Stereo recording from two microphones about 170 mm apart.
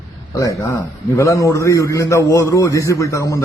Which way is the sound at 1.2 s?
20° left (ahead or behind).